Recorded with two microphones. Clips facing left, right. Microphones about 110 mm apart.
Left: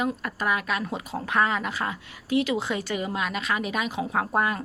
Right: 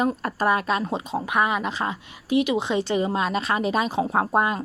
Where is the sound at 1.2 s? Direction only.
15° right (ahead or behind).